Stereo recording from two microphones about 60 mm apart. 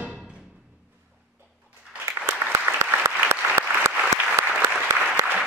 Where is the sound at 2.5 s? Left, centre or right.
Right.